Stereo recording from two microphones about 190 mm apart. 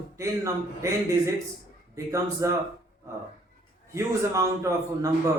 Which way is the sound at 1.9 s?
15° right (ahead or behind).